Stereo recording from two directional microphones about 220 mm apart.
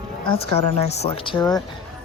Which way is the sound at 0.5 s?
30° left (ahead or behind).